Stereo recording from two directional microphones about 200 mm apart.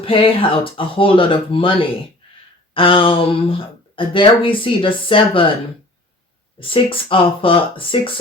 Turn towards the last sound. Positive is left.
turn(degrees=25)  # may be behind; listen again after turning